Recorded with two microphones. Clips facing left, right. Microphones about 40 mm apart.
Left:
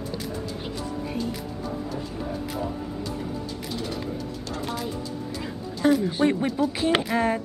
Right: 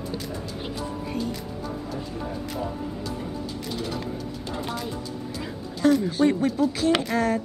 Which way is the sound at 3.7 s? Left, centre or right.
Centre.